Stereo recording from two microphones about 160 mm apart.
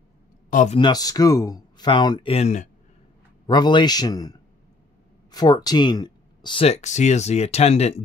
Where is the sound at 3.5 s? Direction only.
30° left (ahead or behind).